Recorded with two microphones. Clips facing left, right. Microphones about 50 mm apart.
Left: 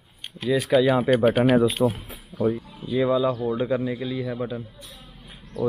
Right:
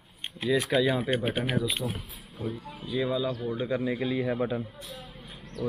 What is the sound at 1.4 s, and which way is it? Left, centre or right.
Speech, left.